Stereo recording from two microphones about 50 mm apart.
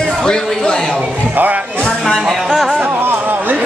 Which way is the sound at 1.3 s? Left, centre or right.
Right.